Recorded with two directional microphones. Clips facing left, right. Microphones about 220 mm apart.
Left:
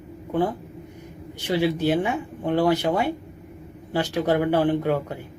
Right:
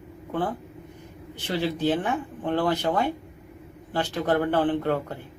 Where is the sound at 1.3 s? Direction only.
10° left (ahead or behind).